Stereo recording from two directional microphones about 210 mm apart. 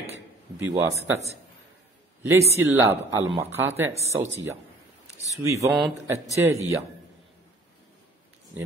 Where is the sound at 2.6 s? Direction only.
10° right (ahead or behind).